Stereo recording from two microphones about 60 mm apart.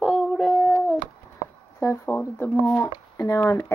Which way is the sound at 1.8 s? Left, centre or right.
Left.